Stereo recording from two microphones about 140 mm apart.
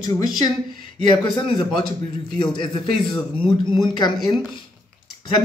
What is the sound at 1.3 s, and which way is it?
A man's voice, 35° left (ahead or behind).